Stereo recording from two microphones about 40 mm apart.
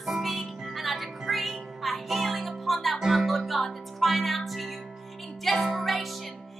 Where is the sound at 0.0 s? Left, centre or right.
Centre.